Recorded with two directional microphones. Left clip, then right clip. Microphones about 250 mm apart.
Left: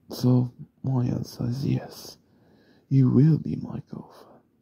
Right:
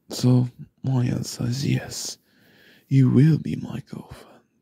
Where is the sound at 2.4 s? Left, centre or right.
Centre.